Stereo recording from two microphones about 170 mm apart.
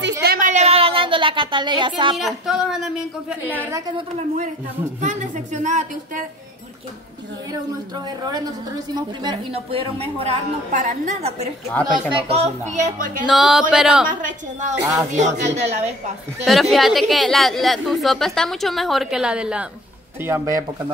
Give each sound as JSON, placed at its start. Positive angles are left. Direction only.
{"t": 0.2, "sound": "a sound", "side_deg": -55}
{"t": 2.1, "sound": "a woman's voice", "side_deg": 0}
{"t": 5.0, "sound": "speech", "side_deg": -45}
{"t": 8.3, "sound": "a woman's voice", "side_deg": -20}
{"t": 11.8, "sound": "a woman's voice", "side_deg": -30}
{"t": 13.3, "sound": "a woman's voice", "side_deg": 0}
{"t": 14.0, "sound": "speech", "side_deg": -50}
{"t": 16.7, "sound": "a woman's voice", "side_deg": 0}
{"t": 20.2, "sound": "speech", "side_deg": -15}